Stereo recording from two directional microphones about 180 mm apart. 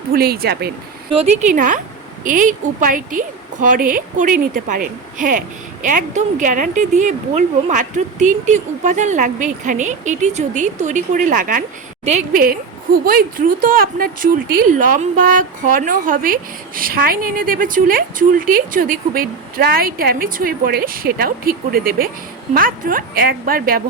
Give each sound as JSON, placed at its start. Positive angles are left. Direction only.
{"t": 0.1, "sound": "speech", "side_deg": -60}
{"t": 1.4, "sound": "a woman's voice", "side_deg": -45}
{"t": 12.4, "sound": "a woman's voice", "side_deg": -55}